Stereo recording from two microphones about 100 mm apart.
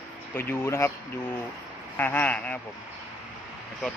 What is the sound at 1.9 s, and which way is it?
Speech, 20° left (ahead or behind).